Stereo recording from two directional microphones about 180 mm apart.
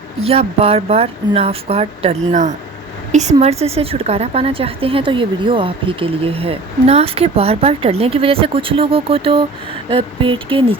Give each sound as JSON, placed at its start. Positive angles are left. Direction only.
{"t": 0.2, "sound": "a woman's voice", "side_deg": -35}